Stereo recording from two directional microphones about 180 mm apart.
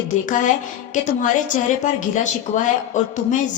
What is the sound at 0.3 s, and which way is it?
A woman's voice, 45° left (ahead or behind).